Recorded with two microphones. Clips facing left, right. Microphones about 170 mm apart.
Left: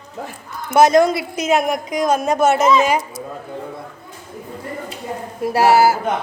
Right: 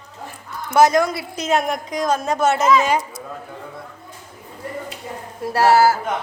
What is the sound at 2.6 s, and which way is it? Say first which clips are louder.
Speech: left 2 dB; 25° left (ahead or behind).